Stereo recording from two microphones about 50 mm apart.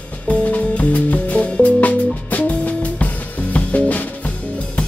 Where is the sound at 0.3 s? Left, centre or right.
Left.